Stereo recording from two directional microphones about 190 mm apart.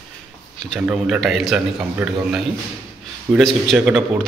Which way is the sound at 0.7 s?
5° right (ahead or behind).